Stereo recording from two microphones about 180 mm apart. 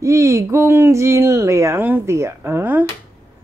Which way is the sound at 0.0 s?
15° right (ahead or behind).